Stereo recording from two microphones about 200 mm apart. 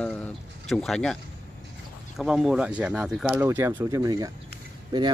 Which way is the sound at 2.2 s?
Centre (ahead or behind).